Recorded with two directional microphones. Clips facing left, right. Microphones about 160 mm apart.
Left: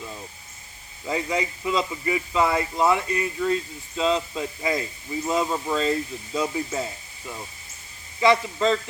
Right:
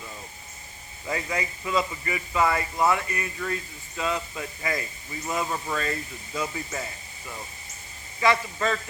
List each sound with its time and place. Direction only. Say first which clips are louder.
1.0 s speech: left 4 dB; 15° left (ahead or behind)
8.2 s speech: left 4 dB; 15° left (ahead or behind)